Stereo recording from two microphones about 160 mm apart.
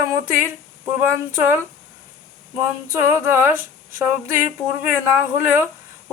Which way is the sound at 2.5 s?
15° right (ahead or behind).